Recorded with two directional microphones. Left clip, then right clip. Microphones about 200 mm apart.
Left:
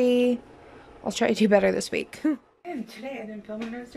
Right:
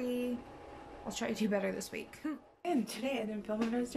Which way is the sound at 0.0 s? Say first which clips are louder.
Left 15 dB; 45° left (ahead or behind).